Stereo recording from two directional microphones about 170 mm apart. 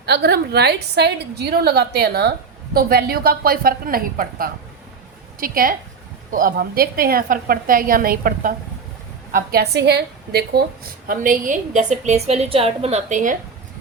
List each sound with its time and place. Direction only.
0.0 s a woman's voice: 75° right (ahead or behind); by 8.5 s 55° right (ahead or behind)
9.3 s a woman's voice: 65° right (ahead or behind); by 13.3 s 45° right (ahead or behind)